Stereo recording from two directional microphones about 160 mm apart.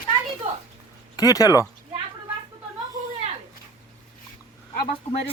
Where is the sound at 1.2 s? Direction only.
25° left (ahead or behind).